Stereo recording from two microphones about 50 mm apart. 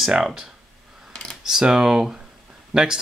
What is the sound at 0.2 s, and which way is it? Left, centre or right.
Speech, centre.